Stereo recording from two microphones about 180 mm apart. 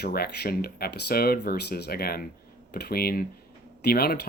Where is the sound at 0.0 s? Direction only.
60° left (ahead or behind).